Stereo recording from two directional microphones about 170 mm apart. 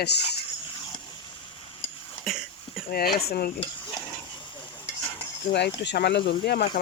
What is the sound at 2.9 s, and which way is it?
Speech, 65° left (ahead or behind).